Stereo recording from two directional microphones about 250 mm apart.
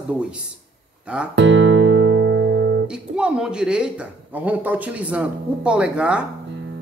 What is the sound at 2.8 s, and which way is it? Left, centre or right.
Speech, centre.